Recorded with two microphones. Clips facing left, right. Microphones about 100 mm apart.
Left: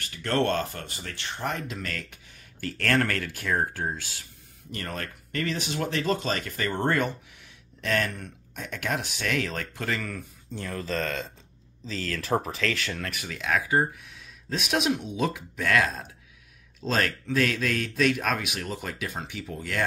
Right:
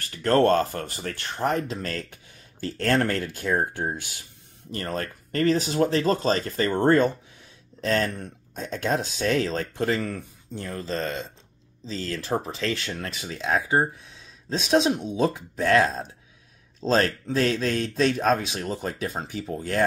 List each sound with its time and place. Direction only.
0.0 s speech: 40° right (ahead or behind); by 4.2 s 20° right (ahead or behind)
4.6 s speech: 35° right (ahead or behind)